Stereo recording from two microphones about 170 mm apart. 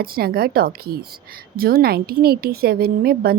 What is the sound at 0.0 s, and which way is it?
Speech, 60° right (ahead or behind).